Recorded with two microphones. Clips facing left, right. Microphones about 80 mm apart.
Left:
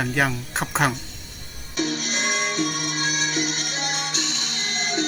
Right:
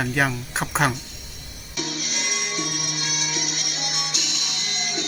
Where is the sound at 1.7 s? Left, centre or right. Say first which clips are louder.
Left 5 dB; left.